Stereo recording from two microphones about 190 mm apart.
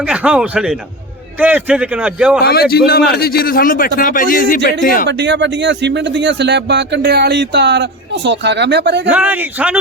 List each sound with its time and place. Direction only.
0.0 s a man's voice: 5° right (ahead or behind)
2.4 s a man's voice: 55° left (ahead or behind)
5.0 s speech: 65° right (ahead or behind)
9.0 s speech: 10° right (ahead or behind)